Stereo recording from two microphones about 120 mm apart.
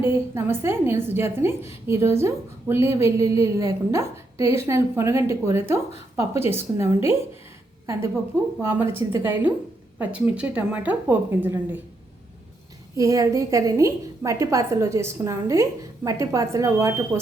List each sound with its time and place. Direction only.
0.0 s a woman's voice: 20° right (ahead or behind)
8.6 s a woman's voice: 20° right (ahead or behind)
13.0 s a woman's voice: 25° right (ahead or behind)